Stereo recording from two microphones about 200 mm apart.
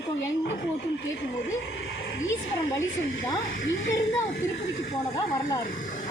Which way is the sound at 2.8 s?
15° left (ahead or behind).